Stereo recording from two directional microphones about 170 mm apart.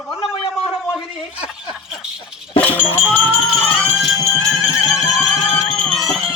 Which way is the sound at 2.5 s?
10° left (ahead or behind).